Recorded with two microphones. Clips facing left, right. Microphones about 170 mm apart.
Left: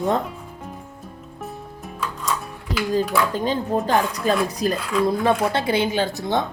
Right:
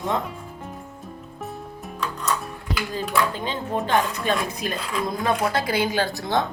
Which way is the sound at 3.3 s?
40° left (ahead or behind).